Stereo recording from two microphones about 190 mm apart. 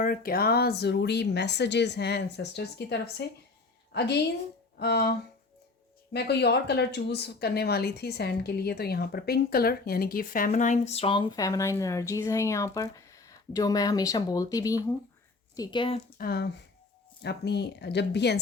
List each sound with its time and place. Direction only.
0.0 s a woman's voice: 50° left (ahead or behind)
6.1 s speech: 60° left (ahead or behind); by 16.0 s 25° left (ahead or behind)
16.1 s a woman's voice: 55° left (ahead or behind)